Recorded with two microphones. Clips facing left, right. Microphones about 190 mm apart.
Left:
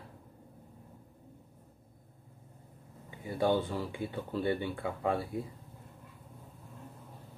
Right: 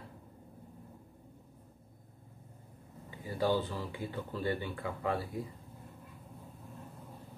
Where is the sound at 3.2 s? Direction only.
20° left (ahead or behind).